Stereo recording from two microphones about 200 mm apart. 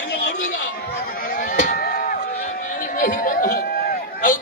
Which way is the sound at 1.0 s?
40° left (ahead or behind).